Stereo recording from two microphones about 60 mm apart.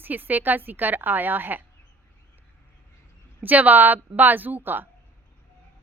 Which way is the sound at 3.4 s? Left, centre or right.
Right.